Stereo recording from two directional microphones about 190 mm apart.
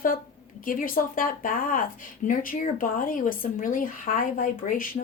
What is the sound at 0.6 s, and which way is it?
Speech, 45° left (ahead or behind).